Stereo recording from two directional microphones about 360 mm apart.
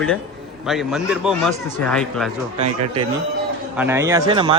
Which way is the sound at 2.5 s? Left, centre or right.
Centre.